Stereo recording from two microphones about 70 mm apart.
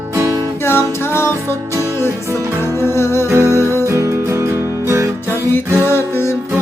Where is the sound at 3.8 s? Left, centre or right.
Right.